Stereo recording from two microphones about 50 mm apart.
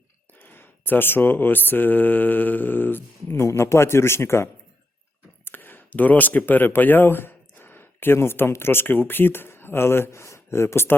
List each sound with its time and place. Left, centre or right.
0.3 s speech: left
3.5 s speech: left
5.5 s speech: left